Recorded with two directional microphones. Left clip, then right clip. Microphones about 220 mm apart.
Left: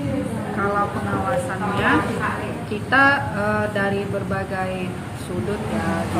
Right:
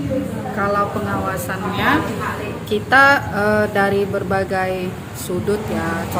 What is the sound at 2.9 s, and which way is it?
A woman's voice, 50° right (ahead or behind).